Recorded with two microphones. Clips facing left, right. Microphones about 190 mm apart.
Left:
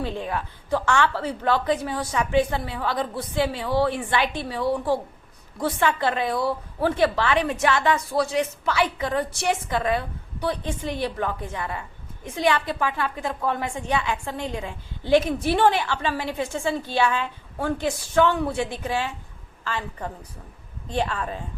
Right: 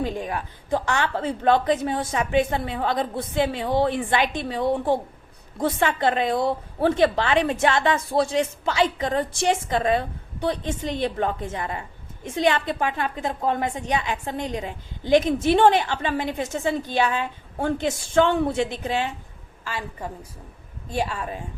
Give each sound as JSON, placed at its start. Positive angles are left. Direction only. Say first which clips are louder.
{"t": 0.0, "sound": "a woman's voice", "louder": "right 1 dB", "side_deg": -15}
{"t": 11.8, "sound": "a sound", "louder": "right 1 dB", "side_deg": -25}
{"t": 12.6, "sound": "a woman's voice", "louder": "right 1 dB", "side_deg": -20}